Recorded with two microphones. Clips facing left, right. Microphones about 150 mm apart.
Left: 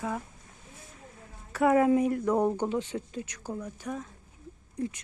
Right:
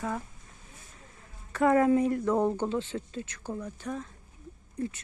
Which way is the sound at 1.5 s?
10° left (ahead or behind).